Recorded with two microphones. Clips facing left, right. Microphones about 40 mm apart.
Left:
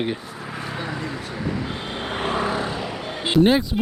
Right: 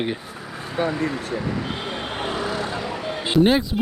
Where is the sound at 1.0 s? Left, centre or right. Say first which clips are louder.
Right 5 dB; right.